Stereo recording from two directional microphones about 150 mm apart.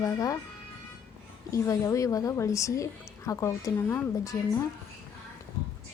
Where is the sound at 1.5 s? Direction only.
20° left (ahead or behind).